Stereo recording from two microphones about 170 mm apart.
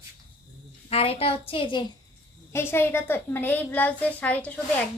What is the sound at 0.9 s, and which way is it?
Speech, 35° left (ahead or behind).